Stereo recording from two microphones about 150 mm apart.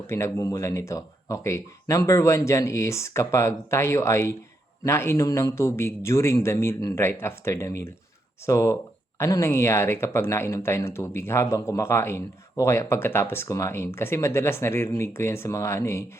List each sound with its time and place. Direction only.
0.3 s speech: 20° left (ahead or behind)